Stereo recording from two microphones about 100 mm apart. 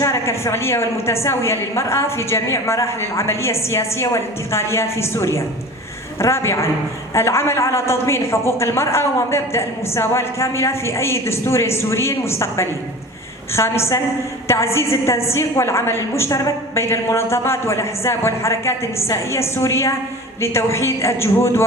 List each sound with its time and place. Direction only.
0.0 s a woman's voice: 30° left (ahead or behind)